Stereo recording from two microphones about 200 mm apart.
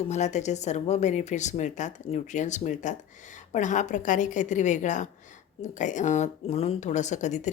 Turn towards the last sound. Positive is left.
turn(degrees=35)  # may be behind; listen again after turning